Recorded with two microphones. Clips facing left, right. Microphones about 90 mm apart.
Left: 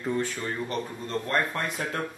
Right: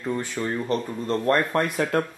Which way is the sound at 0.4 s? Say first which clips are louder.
Right 5 dB; 15° right (ahead or behind).